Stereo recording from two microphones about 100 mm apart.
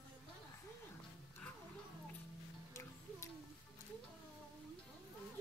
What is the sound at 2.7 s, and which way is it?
Music, 30° left (ahead or behind).